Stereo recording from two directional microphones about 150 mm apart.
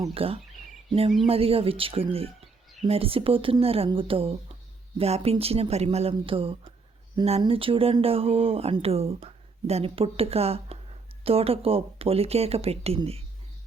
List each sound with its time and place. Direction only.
0.1 s speech: 40° right (ahead or behind)